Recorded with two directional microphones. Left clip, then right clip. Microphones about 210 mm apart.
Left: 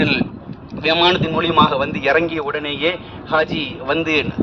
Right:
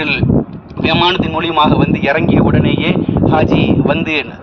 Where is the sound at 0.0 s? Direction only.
50° right (ahead or behind).